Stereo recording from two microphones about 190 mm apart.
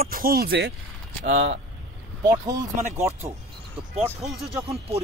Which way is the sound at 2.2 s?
20° right (ahead or behind).